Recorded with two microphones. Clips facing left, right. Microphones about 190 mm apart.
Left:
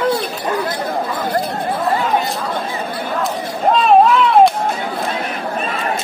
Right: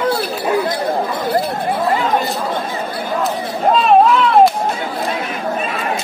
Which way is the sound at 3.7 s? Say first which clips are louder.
Even; centre (ahead or behind).